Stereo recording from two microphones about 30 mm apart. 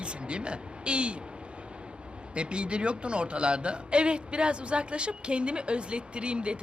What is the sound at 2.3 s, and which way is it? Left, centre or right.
A man's voice, right.